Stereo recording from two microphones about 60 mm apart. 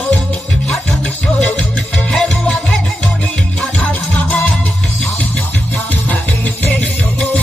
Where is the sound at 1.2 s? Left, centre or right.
Left.